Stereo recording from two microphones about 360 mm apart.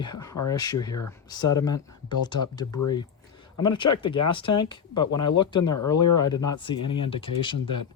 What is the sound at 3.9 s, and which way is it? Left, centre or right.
Speech, centre.